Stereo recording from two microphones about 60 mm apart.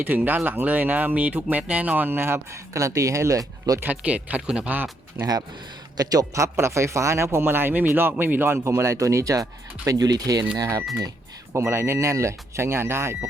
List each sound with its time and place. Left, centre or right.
0.0 s speech: right
2.0 s speech: right
2.7 s speech: right
4.0 s speech: right
4.7 s speech: right
6.0 s a man's voice: right
8.5 s speech: right
10.6 s speech: right
11.5 s a man's voice: right